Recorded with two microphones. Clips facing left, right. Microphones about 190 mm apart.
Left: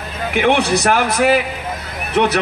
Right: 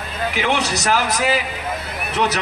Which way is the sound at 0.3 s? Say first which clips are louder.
Left 7 dB; 55° left (ahead or behind).